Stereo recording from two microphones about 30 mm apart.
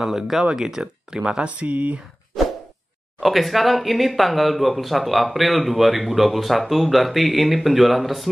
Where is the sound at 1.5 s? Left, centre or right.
Right.